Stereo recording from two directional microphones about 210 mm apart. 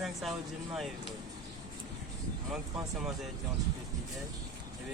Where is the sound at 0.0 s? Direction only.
Centre (ahead or behind).